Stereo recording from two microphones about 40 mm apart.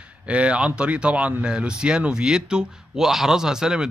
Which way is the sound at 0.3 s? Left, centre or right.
Right.